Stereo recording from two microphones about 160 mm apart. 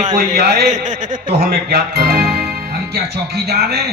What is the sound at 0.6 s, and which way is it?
Speech, 50° right (ahead or behind).